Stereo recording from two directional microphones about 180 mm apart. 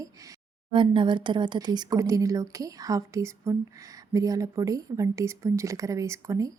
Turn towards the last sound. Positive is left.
turn(degrees=-15)  # may be behind; listen again after turning